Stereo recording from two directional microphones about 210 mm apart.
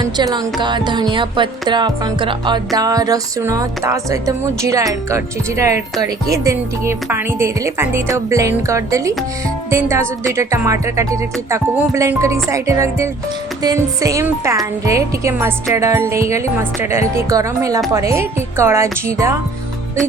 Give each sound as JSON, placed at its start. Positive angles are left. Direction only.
{"t": 0.0, "sound": "music", "side_deg": -20}
{"t": 0.6, "sound": "speech", "side_deg": -20}